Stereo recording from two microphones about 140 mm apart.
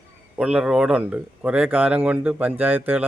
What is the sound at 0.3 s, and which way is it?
Speech, 5° right (ahead or behind).